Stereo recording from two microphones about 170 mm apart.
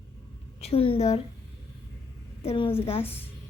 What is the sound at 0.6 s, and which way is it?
Speech, 35° left (ahead or behind).